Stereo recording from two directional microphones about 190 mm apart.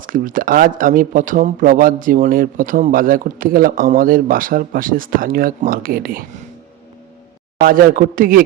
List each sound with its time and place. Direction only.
0.0 s speech: 45° right (ahead or behind)
7.6 s speech: 45° right (ahead or behind)